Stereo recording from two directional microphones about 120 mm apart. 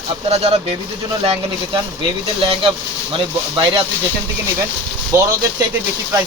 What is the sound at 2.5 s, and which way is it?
Speech, 45° right (ahead or behind).